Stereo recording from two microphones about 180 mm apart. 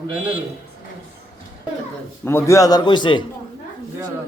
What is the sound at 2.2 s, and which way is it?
A man's voice, 15° left (ahead or behind).